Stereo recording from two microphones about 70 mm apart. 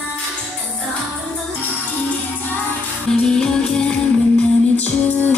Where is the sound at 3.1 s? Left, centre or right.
Centre.